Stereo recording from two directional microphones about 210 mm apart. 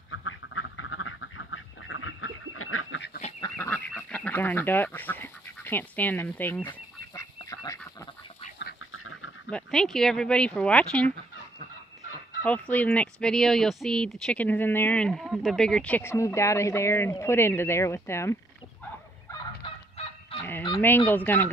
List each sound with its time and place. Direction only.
0.1 s quack: 70° left (ahead or behind); by 3.0 s 90° left
3.3 s goose: 15° left (ahead or behind)
4.1 s duck: 10° left (ahead or behind)
8.9 s duck: 80° left
9.5 s speech: 5° left (ahead or behind)
12.4 s speech: 5° left (ahead or behind)
19.6 s fowl: 25° left (ahead or behind)
20.8 s speech: 10° left (ahead or behind)